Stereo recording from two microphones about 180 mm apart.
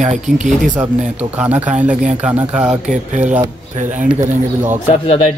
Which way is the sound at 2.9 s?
45° right (ahead or behind).